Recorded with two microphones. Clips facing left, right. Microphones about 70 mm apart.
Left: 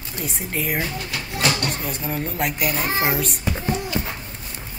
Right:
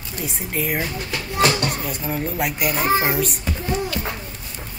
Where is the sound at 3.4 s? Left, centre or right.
Centre.